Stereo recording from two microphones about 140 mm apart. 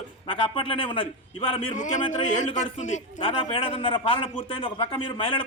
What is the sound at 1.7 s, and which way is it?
A man's voice, 65° left (ahead or behind).